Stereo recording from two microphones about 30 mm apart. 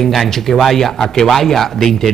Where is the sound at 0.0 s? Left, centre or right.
Centre.